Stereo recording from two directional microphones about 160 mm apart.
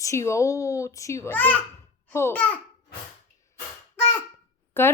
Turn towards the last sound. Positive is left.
turn(degrees=15)  # may be behind; listen again after turning